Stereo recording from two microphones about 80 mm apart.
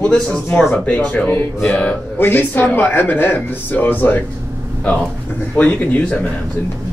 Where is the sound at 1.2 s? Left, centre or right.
Left.